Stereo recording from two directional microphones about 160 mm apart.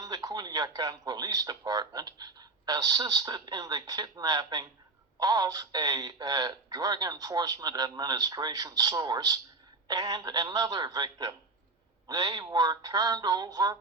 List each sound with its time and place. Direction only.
0.0 s speech: 20° right (ahead or behind)